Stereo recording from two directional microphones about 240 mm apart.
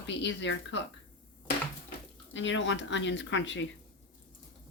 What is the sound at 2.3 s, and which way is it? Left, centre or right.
Speech, left.